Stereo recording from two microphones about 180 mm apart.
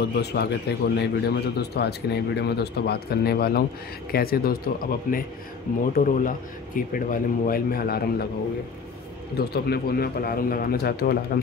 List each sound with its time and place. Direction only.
0.0 s a man's voice: 65° left (ahead or behind)
9.4 s a man's voice: 60° left (ahead or behind)